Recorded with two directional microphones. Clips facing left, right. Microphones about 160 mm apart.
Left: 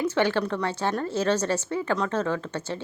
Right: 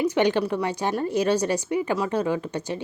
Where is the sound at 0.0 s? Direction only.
15° right (ahead or behind).